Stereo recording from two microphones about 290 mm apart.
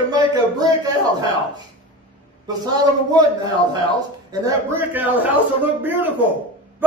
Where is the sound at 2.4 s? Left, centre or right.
Centre.